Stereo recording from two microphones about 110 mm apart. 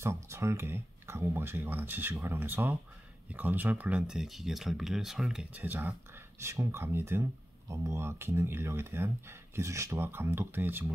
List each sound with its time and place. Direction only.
0.0 s speech: 25° right (ahead or behind); by 5.6 s 5° right (ahead or behind)
5.6 s speech: 20° right (ahead or behind)